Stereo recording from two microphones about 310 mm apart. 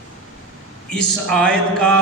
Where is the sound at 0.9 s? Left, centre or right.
Centre.